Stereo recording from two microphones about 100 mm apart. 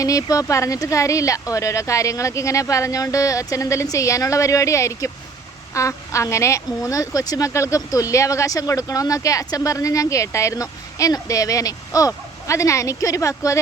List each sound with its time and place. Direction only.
0.0 s speech: 35° left (ahead or behind)